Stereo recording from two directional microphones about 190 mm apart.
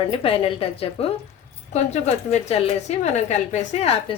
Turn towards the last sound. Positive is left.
turn(degrees=35)  # may be behind; listen again after turning